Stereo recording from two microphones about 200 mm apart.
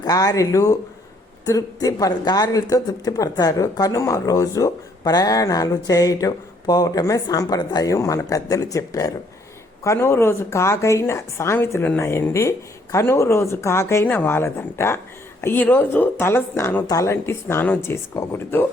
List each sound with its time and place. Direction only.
0.0 s speech: 20° left (ahead or behind)